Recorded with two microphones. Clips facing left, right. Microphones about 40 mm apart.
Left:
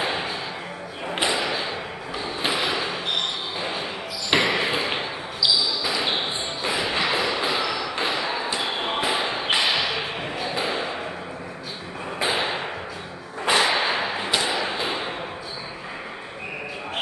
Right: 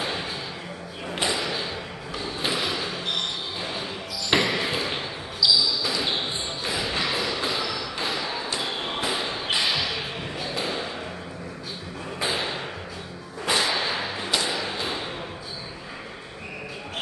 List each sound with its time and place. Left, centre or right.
0.0 s music: left
1.0 s thump: left
2.1 s a sound: centre
4.3 s basketball bounce: centre
12.2 s thump: left
13.5 s whip: left